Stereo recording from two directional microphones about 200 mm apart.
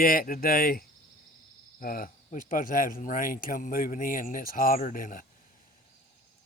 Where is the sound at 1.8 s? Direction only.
45° left (ahead or behind).